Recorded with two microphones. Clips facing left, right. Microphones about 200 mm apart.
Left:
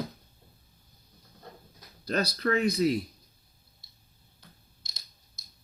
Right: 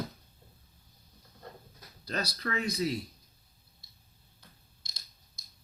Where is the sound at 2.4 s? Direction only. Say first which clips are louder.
Left 9 dB; 50° left (ahead or behind).